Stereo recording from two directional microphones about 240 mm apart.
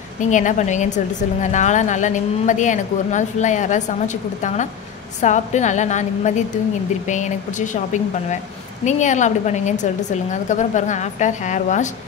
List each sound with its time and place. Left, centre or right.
0.2 s a woman's voice: left